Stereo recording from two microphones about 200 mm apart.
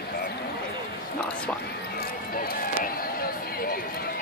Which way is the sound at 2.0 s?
45° left (ahead or behind).